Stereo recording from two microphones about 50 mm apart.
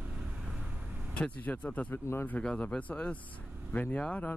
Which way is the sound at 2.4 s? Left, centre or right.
Left.